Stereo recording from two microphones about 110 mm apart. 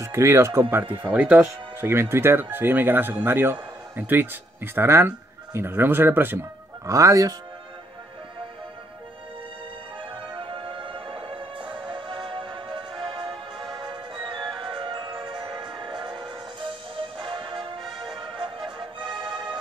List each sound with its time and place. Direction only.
0.0 s speech: 25° right (ahead or behind)
6.9 s speech: 30° right (ahead or behind)
10.3 s music: 50° right (ahead or behind)